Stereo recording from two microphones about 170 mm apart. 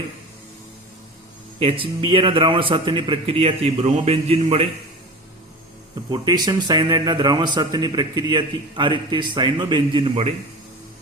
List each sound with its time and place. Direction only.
1.5 s a man's voice: 35° right (ahead or behind)
6.1 s a man's voice: 25° right (ahead or behind)